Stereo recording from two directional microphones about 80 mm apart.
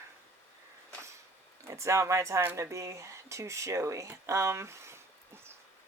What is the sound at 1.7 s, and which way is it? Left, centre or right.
Speech, right.